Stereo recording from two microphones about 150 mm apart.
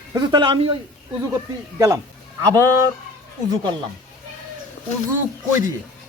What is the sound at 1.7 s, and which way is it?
Speech, 20° right (ahead or behind).